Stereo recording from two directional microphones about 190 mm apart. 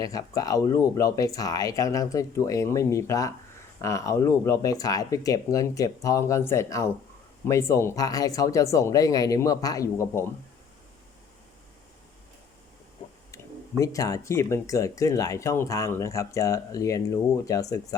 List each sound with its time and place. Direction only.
0.0 s speech: 20° left (ahead or behind)
13.3 s speech: 15° left (ahead or behind)